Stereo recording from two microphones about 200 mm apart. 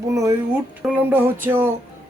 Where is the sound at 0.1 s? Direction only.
15° right (ahead or behind).